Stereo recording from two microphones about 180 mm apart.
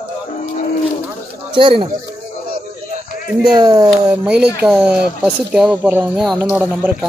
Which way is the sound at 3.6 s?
20° right (ahead or behind).